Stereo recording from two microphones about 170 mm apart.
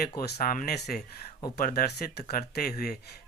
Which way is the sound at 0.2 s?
60° left (ahead or behind).